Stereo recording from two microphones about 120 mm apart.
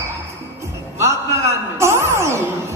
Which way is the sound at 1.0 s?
25° right (ahead or behind).